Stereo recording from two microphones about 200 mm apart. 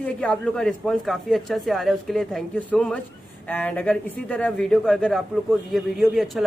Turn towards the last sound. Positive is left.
turn(degrees=0)  # may be behind; listen again after turning